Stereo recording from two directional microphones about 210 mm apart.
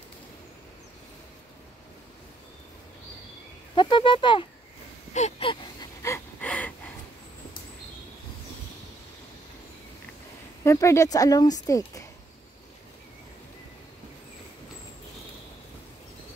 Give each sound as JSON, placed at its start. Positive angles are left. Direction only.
{"t": 3.7, "sound": "speech", "side_deg": 25}
{"t": 5.1, "sound": "gasp", "side_deg": 30}
{"t": 6.0, "sound": "gasp", "side_deg": 10}
{"t": 10.6, "sound": "speech", "side_deg": 15}